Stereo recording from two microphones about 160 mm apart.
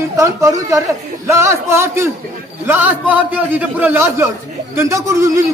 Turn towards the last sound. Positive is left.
turn(degrees=-20)  # may be behind; listen again after turning